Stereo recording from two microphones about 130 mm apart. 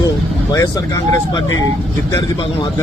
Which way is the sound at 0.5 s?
25° left (ahead or behind).